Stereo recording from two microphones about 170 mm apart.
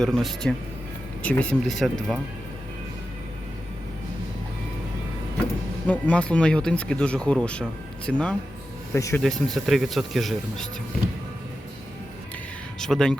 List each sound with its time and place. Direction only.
0.0 s speech: centre (ahead or behind)
5.9 s speech: 5° left (ahead or behind)
9.2 s speech: centre (ahead or behind)
12.8 s speech: 5° left (ahead or behind)